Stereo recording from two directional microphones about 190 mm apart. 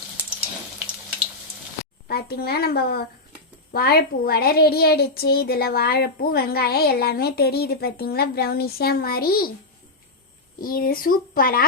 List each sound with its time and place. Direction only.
2.0 s a woman's voice: 55° left (ahead or behind)
10.6 s speech: 50° left (ahead or behind)